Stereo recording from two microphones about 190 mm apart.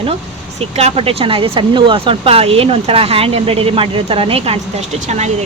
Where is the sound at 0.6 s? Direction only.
35° right (ahead or behind).